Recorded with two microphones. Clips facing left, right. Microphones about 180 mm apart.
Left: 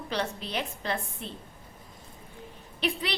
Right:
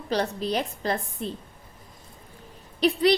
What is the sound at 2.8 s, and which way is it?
Speech, 40° right (ahead or behind).